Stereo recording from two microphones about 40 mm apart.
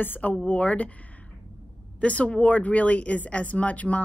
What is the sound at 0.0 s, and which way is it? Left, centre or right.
Speech, left.